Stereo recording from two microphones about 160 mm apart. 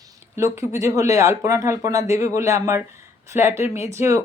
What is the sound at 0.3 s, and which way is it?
Speech, 15° right (ahead or behind).